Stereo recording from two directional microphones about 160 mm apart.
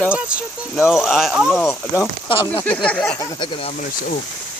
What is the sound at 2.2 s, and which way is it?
Speech, 30° left (ahead or behind).